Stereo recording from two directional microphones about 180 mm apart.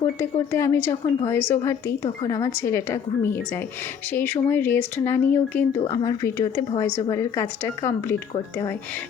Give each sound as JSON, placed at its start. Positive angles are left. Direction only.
{"t": 0.0, "sound": "speech", "side_deg": 15}
{"t": 5.8, "sound": "speech", "side_deg": 20}